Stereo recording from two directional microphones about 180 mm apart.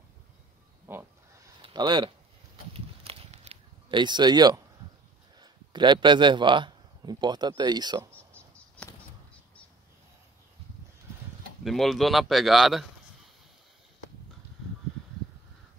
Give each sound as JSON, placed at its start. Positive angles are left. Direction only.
{"t": 0.9, "sound": "a sound", "side_deg": -10}
{"t": 1.6, "sound": "speech", "side_deg": -25}
{"t": 2.7, "sound": "a sound", "side_deg": -35}
{"t": 5.4, "sound": "a man's voice", "side_deg": -25}
{"t": 8.4, "sound": "bird flight", "side_deg": 5}
{"t": 11.6, "sound": "speech", "side_deg": 0}